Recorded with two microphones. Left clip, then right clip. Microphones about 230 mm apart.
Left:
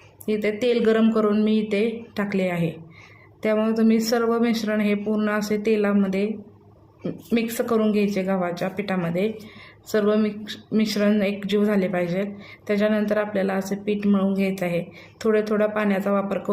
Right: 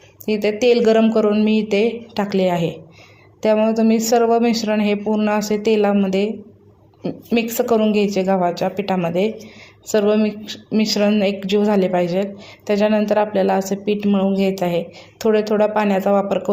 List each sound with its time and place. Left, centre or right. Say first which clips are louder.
0.3 s speech: right 6 dB; centre